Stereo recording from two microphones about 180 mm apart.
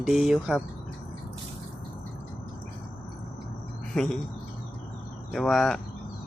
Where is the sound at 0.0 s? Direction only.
Centre (ahead or behind).